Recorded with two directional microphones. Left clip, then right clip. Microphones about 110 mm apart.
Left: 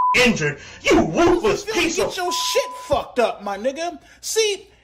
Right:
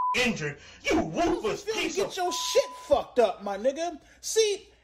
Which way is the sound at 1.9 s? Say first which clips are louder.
Left 7 dB; 25° left (ahead or behind).